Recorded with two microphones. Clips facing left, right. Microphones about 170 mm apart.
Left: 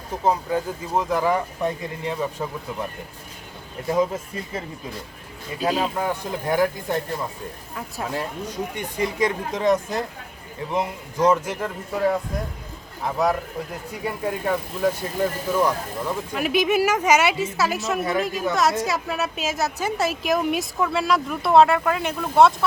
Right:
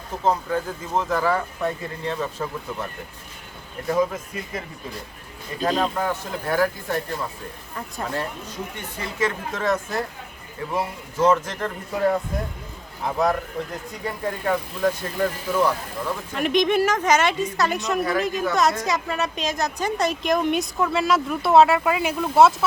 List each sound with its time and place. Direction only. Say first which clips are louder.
0.3 s speech: even; 10° left (ahead or behind)
3.8 s speech: even; 25° left (ahead or behind)
5.5 s speech: even; 10° left (ahead or behind)
7.8 s a woman's voice: even; 5° left (ahead or behind)